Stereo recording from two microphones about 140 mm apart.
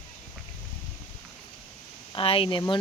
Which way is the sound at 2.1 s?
40° left (ahead or behind).